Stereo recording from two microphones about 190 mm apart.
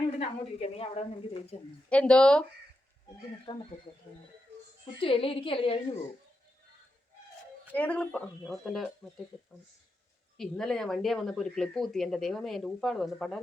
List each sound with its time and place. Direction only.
0.2 s a woman's voice: 30° left (ahead or behind)
1.9 s speech: 5° left (ahead or behind)
3.4 s a woman's voice: 25° left (ahead or behind)
4.9 s a woman's voice: 30° left (ahead or behind)
7.7 s speech: 10° left (ahead or behind)
10.3 s speech: centre (ahead or behind)